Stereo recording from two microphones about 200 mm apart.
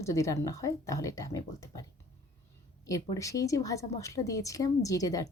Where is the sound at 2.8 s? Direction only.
15° left (ahead or behind).